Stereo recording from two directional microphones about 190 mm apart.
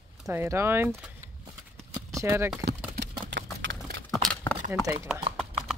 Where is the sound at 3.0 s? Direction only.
65° right (ahead or behind).